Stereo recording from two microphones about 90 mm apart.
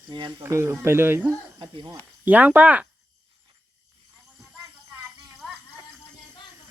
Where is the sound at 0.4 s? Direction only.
30° right (ahead or behind).